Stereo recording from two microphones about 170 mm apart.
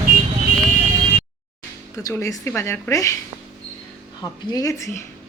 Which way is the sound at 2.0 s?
20° left (ahead or behind).